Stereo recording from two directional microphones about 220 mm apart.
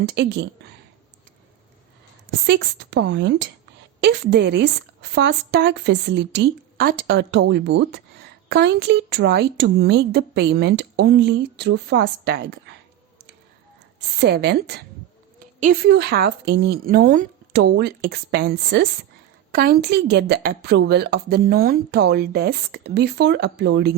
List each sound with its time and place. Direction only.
0.1 s a woman's voice: 50° right (ahead or behind)
2.5 s a woman's voice: 55° right (ahead or behind)
14.0 s a woman's voice: 50° right (ahead or behind)